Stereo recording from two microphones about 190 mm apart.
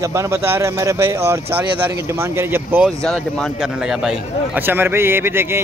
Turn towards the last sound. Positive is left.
turn(degrees=-10)  # may be behind; listen again after turning